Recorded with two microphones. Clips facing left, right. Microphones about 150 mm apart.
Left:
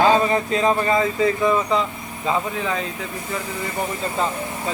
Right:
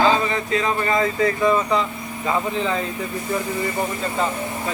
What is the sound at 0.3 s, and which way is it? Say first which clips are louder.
Speech: left 3 dB; 30° left (ahead or behind).